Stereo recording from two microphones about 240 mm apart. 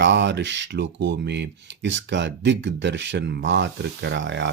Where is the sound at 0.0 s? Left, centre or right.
Right.